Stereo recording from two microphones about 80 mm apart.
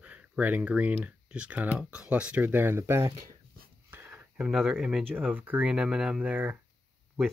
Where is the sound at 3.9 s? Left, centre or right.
Right.